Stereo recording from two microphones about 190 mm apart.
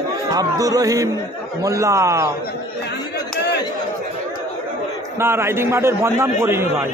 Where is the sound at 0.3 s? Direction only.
20° right (ahead or behind).